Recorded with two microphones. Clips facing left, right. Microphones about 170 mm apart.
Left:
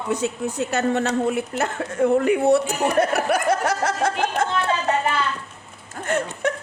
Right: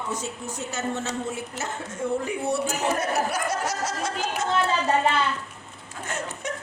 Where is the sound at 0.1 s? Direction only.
60° left (ahead or behind).